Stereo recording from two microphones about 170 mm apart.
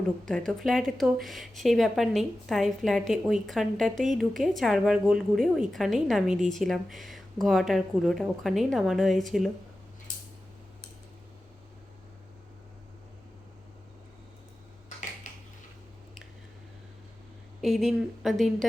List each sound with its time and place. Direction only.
0.3 s a woman's voice: 5° left (ahead or behind)
15.3 s a sound: 50° left (ahead or behind)
17.6 s a woman's voice: centre (ahead or behind)